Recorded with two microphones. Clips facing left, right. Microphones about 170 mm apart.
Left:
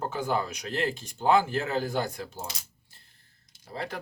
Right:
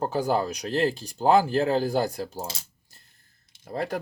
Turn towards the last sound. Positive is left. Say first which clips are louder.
# right 6 dB
turn(degrees=-45)  # may be behind; listen again after turning